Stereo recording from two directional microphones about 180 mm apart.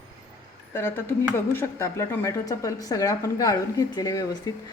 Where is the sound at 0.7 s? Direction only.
15° left (ahead or behind).